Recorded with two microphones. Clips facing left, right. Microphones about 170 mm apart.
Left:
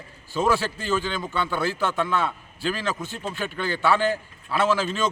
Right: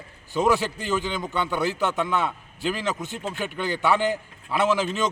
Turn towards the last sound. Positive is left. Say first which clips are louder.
# even
turn(degrees=-20)  # may be behind; listen again after turning